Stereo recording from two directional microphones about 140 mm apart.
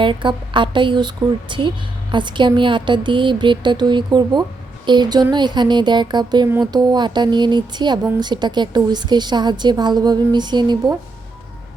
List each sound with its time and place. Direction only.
0.0 s a woman's voice: 35° right (ahead or behind)